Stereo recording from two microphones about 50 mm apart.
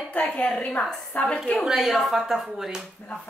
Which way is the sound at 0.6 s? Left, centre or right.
Left.